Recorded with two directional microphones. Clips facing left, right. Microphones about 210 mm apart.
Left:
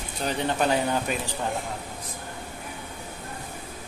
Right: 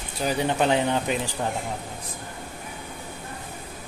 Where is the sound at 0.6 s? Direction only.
20° right (ahead or behind).